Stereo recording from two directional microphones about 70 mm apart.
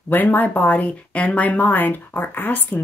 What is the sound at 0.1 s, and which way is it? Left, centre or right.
Speech, left.